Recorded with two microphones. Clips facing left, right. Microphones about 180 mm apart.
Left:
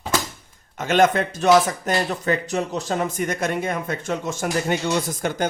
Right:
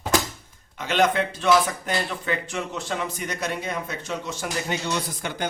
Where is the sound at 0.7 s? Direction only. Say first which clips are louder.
Left 4 dB; 45° left (ahead or behind).